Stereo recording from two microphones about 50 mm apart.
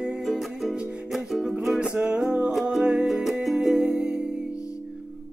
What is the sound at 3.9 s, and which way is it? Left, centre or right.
Music, centre.